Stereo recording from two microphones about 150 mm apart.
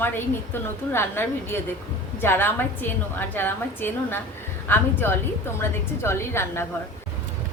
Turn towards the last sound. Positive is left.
turn(degrees=15)  # may be behind; listen again after turning